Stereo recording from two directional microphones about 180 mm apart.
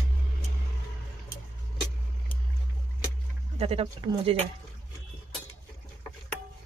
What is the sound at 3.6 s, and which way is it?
Speech, 35° right (ahead or behind).